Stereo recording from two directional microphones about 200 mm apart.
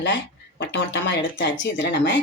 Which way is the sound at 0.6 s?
65° left (ahead or behind).